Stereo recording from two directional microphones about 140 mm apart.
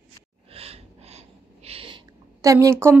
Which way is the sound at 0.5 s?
45° right (ahead or behind).